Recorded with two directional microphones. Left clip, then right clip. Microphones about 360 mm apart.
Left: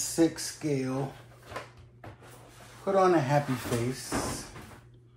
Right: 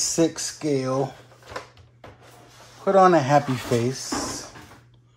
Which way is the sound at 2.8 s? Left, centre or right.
Right.